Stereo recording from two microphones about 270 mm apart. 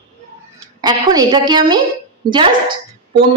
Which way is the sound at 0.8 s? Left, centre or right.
Centre.